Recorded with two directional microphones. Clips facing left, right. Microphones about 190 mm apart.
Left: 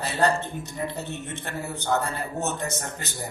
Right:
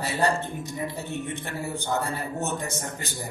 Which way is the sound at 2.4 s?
15° right (ahead or behind).